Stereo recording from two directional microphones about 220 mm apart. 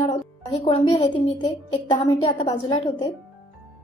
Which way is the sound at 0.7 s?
20° left (ahead or behind).